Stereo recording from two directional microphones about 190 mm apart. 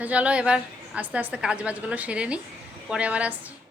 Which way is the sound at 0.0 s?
5° right (ahead or behind).